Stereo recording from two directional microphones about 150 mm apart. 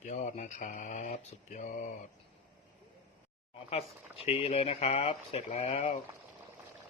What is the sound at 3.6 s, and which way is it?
Speech, 40° left (ahead or behind).